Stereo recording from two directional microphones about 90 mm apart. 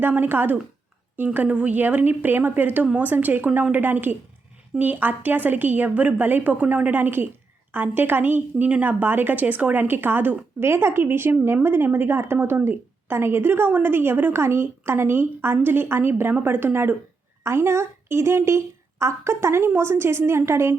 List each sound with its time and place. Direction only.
0.0 s a woman's voice: 20° right (ahead or behind)